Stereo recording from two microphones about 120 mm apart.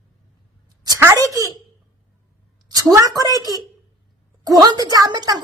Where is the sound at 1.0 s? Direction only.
25° right (ahead or behind).